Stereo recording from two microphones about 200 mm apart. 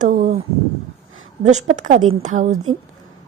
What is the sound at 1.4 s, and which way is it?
A woman's voice, 35° right (ahead or behind).